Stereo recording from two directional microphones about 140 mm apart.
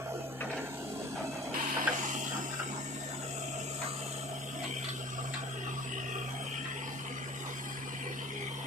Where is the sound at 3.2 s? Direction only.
55° right (ahead or behind).